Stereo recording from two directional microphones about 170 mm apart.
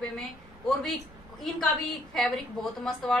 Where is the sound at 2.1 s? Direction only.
Centre (ahead or behind).